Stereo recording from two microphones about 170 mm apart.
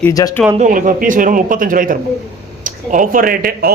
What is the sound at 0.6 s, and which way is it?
A man's voice, 50° right (ahead or behind).